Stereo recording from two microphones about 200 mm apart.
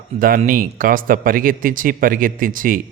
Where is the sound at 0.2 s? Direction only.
45° right (ahead or behind).